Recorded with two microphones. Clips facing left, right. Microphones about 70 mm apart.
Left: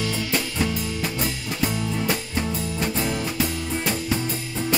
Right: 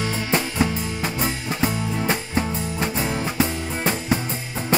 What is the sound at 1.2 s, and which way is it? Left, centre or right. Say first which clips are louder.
Music: right 5 dB; right.